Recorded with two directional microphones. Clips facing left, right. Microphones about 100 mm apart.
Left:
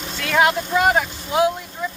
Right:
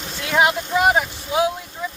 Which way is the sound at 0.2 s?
15° right (ahead or behind).